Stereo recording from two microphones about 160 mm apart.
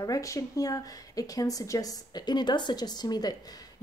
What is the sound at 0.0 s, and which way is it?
Speech, 20° left (ahead or behind).